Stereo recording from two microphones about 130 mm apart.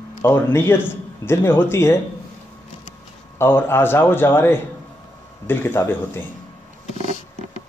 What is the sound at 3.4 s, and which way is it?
Speech, 15° left (ahead or behind).